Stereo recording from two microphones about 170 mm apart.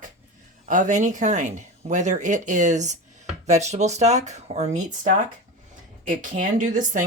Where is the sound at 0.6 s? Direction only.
50° right (ahead or behind).